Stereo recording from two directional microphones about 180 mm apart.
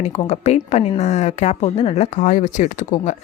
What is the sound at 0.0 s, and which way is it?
A woman's voice, 40° left (ahead or behind).